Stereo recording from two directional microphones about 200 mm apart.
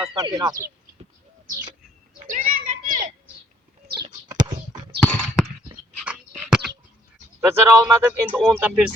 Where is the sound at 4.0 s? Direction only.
20° right (ahead or behind).